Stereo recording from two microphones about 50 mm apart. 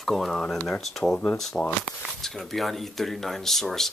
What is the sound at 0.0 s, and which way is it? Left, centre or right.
Speech, centre.